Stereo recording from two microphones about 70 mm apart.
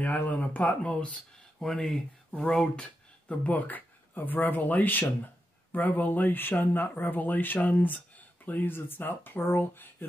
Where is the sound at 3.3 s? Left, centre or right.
Left.